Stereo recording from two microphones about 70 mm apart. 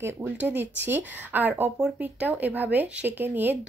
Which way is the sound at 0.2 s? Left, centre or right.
Right.